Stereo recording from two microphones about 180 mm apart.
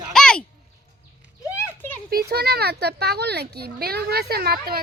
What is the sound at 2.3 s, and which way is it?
Children playing, 60° right (ahead or behind).